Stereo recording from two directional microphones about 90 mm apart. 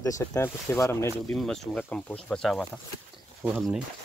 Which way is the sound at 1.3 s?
10° left (ahead or behind).